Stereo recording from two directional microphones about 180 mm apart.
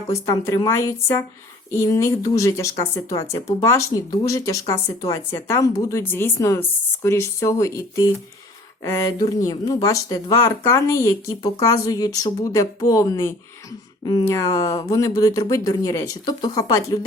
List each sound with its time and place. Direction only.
0.1 s speech: 15° left (ahead or behind)